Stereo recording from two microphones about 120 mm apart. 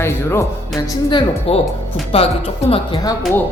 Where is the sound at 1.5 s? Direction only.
55° left (ahead or behind).